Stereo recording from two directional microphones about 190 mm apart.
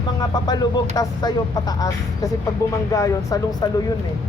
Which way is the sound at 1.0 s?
20° left (ahead or behind).